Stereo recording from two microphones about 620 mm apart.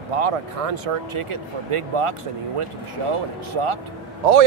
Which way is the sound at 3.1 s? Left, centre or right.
Right.